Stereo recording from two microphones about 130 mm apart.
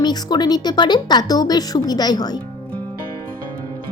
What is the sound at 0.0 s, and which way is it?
A woman's voice, 30° left (ahead or behind).